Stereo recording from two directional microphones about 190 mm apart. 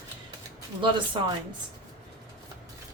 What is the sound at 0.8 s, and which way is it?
Speech, 25° right (ahead or behind).